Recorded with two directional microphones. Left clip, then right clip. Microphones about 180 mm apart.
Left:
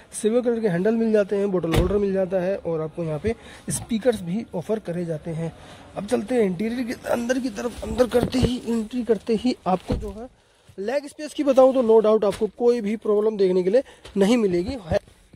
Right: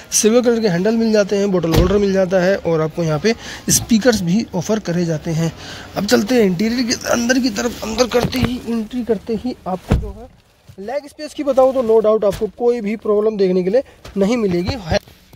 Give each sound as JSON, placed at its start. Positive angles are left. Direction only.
{"t": 0.2, "sound": "speech", "side_deg": 5}
{"t": 7.9, "sound": "speech", "side_deg": 25}
{"t": 8.5, "sound": "speech", "side_deg": 5}
{"t": 9.3, "sound": "speech", "side_deg": 20}
{"t": 10.9, "sound": "speech", "side_deg": 15}